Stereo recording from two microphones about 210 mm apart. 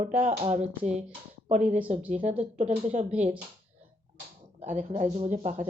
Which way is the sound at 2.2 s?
30° right (ahead or behind).